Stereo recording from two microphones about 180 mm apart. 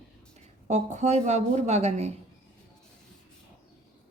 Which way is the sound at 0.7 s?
40° right (ahead or behind).